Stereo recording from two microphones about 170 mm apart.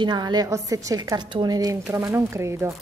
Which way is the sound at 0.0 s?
25° right (ahead or behind).